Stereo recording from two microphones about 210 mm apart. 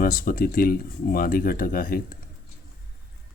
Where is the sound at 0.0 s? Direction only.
40° left (ahead or behind).